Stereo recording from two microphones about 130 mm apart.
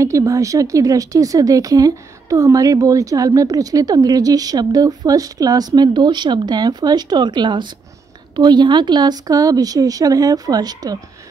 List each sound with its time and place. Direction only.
0.0 s speech: 25° right (ahead or behind)